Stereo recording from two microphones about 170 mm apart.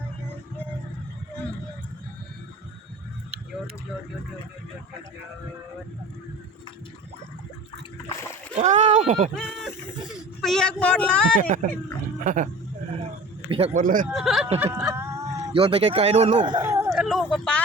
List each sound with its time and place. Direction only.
8.5 s speech: 45° right (ahead or behind)
9.3 s speech: centre (ahead or behind)
11.3 s speech: 50° right (ahead or behind)
13.5 s speech: 35° right (ahead or behind)
13.8 s speech: 50° right (ahead or behind)
14.1 s speech: centre (ahead or behind)
15.5 s speech: 35° right (ahead or behind)
16.6 s a sound: 15° right (ahead or behind)
16.9 s a sound: centre (ahead or behind)